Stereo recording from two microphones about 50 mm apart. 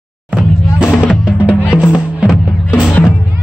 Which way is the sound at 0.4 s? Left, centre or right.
Centre.